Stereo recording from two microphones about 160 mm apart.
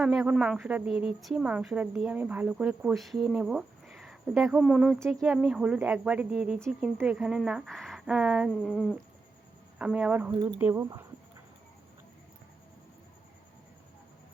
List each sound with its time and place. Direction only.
0.0 s a woman's voice: 5° right (ahead or behind)